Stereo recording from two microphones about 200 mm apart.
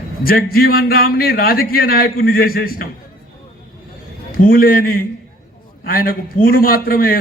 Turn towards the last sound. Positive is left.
turn(degrees=45)  # may be behind; listen again after turning